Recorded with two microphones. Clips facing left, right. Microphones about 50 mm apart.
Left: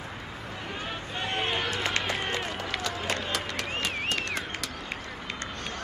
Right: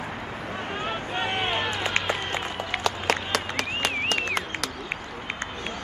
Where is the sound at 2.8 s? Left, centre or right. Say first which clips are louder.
Right 8 dB; right.